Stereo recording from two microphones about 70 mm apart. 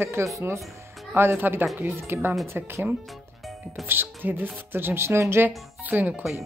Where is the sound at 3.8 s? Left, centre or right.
Right.